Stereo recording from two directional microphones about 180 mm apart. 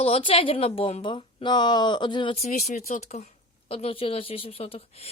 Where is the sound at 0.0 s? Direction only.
30° left (ahead or behind).